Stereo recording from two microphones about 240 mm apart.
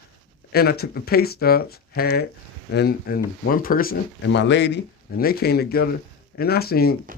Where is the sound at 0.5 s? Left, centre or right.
Left.